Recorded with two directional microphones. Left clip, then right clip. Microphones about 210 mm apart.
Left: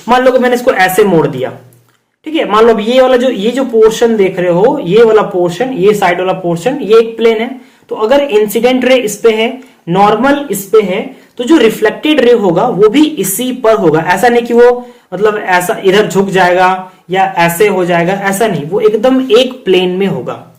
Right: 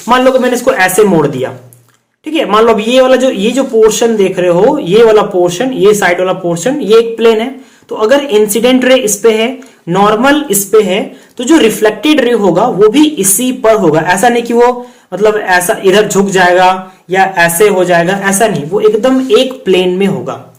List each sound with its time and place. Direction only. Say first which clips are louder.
0.1 s speech: even; 10° right (ahead or behind)